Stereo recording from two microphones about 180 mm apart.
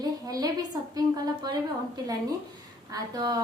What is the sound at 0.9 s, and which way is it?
Speech, 20° right (ahead or behind).